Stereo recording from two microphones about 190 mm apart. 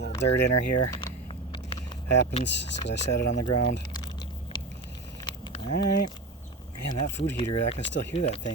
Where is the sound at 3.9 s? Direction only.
20° left (ahead or behind).